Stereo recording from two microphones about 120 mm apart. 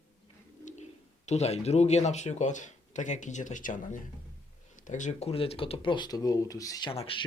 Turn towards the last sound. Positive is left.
turn(degrees=50)  # may be behind; listen again after turning